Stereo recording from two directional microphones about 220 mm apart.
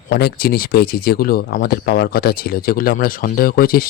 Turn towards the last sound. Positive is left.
turn(degrees=40)  # may be behind; listen again after turning